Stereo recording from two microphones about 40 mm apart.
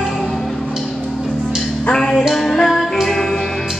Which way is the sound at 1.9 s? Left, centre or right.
Centre.